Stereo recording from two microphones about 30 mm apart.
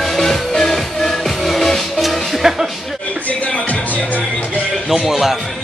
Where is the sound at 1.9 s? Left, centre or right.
Centre.